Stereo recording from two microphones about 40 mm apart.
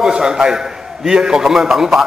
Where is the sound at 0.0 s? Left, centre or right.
Centre.